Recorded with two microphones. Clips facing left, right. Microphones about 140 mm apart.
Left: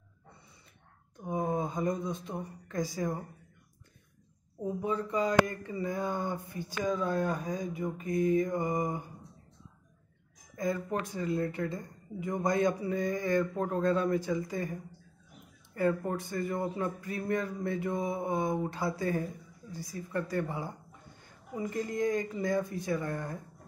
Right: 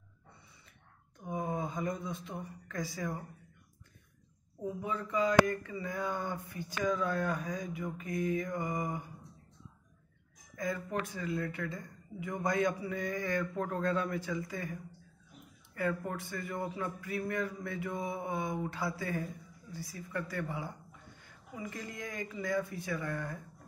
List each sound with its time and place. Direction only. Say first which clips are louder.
1.2 s a sound: left 4 dB; 35° left (ahead or behind)
2.2 s speech: left 4 dB; 40° left (ahead or behind)
4.6 s speech: left 5 dB; 35° left (ahead or behind)
10.5 s speech: left 4 dB; 35° left (ahead or behind)